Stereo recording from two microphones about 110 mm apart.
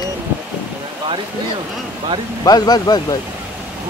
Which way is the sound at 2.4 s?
35° left (ahead or behind).